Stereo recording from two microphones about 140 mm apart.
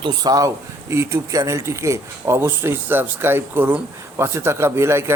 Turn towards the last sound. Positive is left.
turn(degrees=-20)  # may be behind; listen again after turning